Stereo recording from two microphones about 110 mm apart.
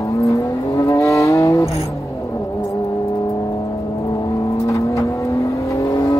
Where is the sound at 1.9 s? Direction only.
30° left (ahead or behind).